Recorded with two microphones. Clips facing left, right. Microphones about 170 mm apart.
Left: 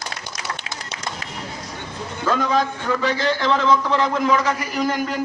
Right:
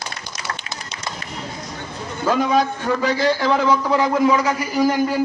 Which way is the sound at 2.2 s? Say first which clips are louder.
Right 2 dB; 10° right (ahead or behind).